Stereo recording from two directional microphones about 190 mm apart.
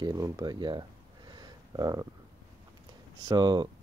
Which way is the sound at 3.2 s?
20° right (ahead or behind).